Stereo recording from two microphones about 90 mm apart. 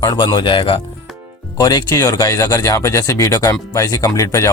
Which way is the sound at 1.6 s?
45° left (ahead or behind).